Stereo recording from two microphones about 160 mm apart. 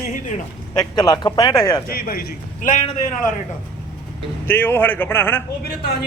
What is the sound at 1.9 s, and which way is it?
Speech, 65° left (ahead or behind).